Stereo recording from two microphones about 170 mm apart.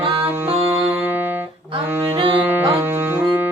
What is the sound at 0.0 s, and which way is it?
Music, 30° right (ahead or behind).